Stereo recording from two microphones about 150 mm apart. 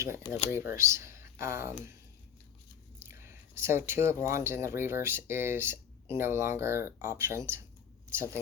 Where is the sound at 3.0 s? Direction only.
15° right (ahead or behind).